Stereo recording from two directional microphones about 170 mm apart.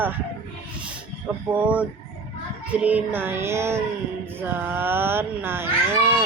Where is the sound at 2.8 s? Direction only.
10° right (ahead or behind).